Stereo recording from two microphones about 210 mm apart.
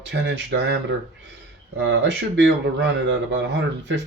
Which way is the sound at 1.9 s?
55° right (ahead or behind).